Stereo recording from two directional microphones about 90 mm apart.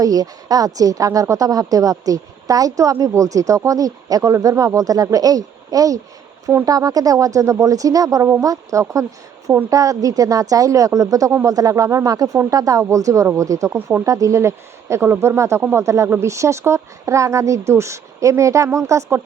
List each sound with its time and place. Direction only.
0.0 s a woman's voice: 40° right (ahead or behind)